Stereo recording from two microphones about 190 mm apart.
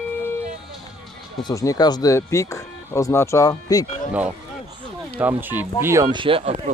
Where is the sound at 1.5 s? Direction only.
20° left (ahead or behind).